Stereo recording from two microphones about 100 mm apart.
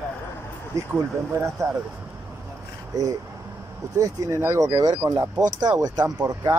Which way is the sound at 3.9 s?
35° right (ahead or behind).